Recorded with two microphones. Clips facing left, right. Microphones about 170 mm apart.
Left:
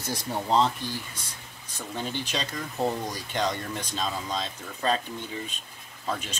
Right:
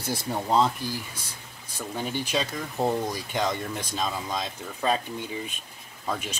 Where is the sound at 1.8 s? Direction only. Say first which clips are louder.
Right 2 dB; 10° right (ahead or behind).